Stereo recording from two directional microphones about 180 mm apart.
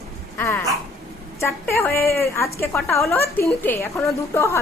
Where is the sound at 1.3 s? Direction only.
15° left (ahead or behind).